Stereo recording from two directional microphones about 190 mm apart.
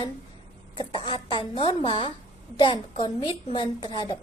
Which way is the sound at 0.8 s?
30° left (ahead or behind).